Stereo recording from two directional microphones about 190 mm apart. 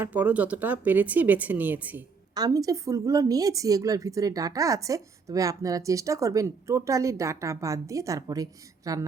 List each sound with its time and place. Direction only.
0.0 s a woman's voice: 10° right (ahead or behind)
2.3 s a woman's voice: 20° right (ahead or behind)